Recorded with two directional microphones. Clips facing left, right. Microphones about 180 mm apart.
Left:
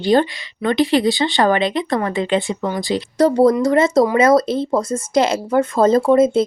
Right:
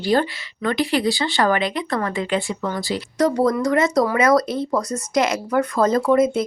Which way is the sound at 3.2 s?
30° left (ahead or behind).